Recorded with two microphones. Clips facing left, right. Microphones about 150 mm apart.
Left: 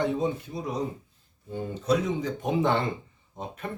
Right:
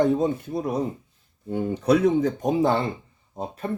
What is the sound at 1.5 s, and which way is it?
Speech, 65° right (ahead or behind).